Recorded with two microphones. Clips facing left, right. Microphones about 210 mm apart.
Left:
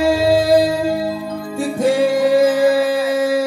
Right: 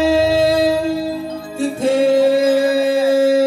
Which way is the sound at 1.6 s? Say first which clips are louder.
Even; 25° right (ahead or behind).